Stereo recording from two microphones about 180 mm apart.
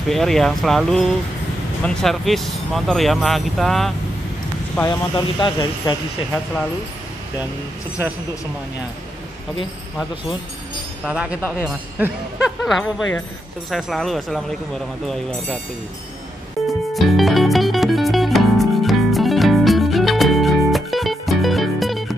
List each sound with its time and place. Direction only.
0.1 s speech: centre (ahead or behind)
4.8 s speech: 25° left (ahead or behind)
11.1 s speech: 5° right (ahead or behind)
16.6 s music: centre (ahead or behind)